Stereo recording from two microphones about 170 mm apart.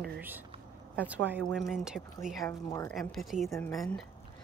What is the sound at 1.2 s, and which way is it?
A woman's voice, 10° right (ahead or behind).